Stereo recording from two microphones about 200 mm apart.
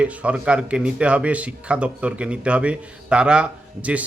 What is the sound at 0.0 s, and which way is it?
Speech, 5° right (ahead or behind).